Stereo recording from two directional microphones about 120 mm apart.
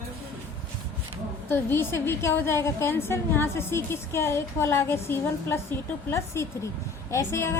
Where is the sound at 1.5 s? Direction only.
20° left (ahead or behind).